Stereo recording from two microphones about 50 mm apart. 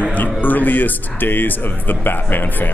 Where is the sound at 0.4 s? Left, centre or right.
Left.